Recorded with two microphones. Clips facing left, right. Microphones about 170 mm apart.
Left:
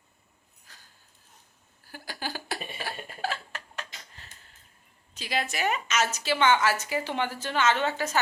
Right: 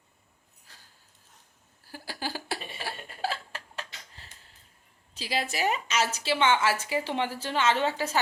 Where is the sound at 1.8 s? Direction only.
30° right (ahead or behind).